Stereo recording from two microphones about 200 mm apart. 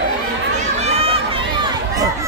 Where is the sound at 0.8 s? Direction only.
30° right (ahead or behind).